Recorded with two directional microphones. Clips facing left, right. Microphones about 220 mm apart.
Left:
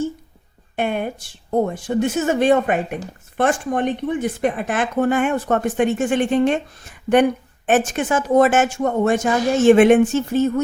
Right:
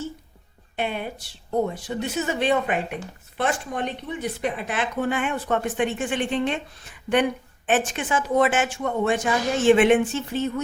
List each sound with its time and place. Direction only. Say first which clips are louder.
0.8 s a woman's voice: left 6 dB; 50° left (ahead or behind)